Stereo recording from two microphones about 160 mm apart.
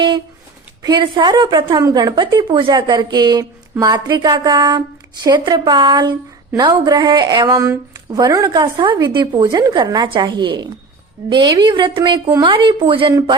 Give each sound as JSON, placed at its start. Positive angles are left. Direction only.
{"t": 0.8, "sound": "speech", "side_deg": -25}